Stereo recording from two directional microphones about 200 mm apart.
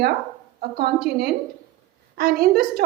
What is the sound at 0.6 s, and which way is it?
A woman's voice, 55° right (ahead or behind).